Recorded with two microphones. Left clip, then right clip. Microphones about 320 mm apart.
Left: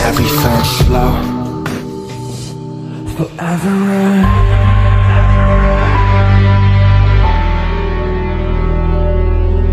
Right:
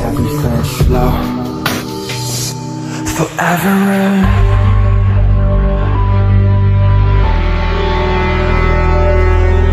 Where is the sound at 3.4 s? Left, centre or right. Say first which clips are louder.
Right 5 dB; right.